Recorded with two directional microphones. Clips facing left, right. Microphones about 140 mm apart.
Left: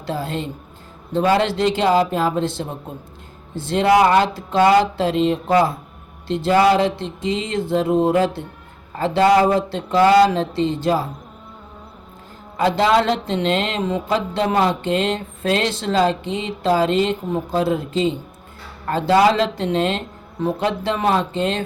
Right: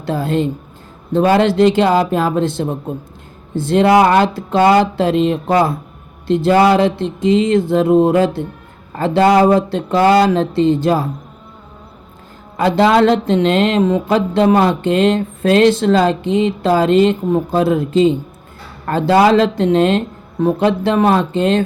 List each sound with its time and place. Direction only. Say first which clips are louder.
0.0 s speech: right 8 dB; 55° right (ahead or behind)
3.7 s speech: right 4 dB; 60° right (ahead or behind)
12.5 s speech: right 4 dB; 60° right (ahead or behind)